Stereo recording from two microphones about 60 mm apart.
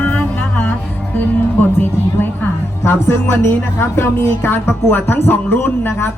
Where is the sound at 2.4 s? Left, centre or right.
Left.